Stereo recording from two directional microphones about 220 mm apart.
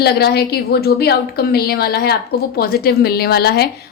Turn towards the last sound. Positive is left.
turn(degrees=45)  # may be behind; listen again after turning